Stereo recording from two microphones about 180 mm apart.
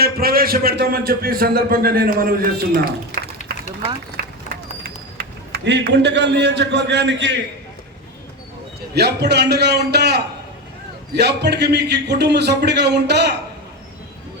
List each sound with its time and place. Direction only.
0.0 s a man's voice: 55° right (ahead or behind)
3.1 s a sound: 45° left (ahead or behind)
5.1 s a man's voice: 70° right (ahead or behind)
9.0 s a man's voice: 70° right (ahead or behind)